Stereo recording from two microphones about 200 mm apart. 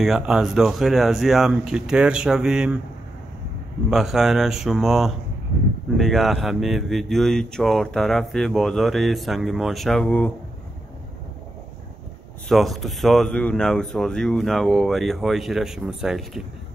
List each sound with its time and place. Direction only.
0.0 s speech: centre (ahead or behind)
3.9 s speech: centre (ahead or behind)
12.4 s speech: centre (ahead or behind)